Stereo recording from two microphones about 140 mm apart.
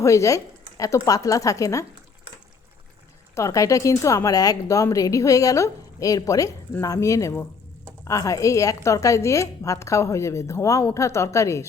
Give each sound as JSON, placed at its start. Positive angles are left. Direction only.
{"t": 0.0, "sound": "speech", "side_deg": 20}
{"t": 3.3, "sound": "speech", "side_deg": 25}